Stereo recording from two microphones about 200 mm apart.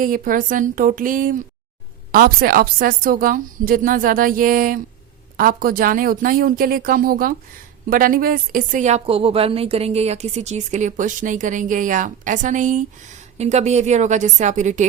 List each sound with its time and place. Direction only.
0.0 s a woman's voice: 45° right (ahead or behind)